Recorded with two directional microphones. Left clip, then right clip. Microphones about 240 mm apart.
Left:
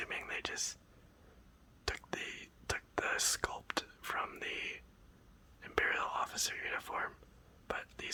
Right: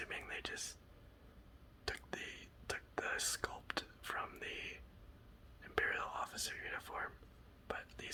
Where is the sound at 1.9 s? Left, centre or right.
Left.